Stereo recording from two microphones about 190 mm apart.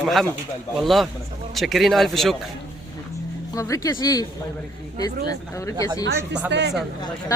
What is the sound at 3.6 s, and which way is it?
Speech, 15° left (ahead or behind).